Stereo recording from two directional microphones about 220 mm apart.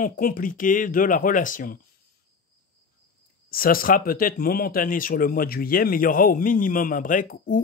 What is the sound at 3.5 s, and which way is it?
Speech, 40° left (ahead or behind).